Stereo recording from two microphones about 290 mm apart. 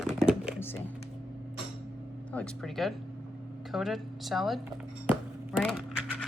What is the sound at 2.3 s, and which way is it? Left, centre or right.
Speech, centre.